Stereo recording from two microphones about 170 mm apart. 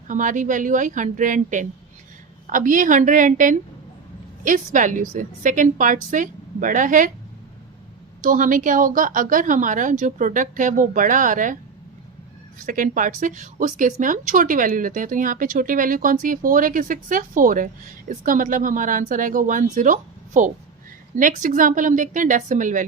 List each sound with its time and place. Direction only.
0.1 s a woman's voice: 50° right (ahead or behind)
8.2 s a woman's voice: 50° right (ahead or behind)
12.5 s a woman's voice: 50° right (ahead or behind)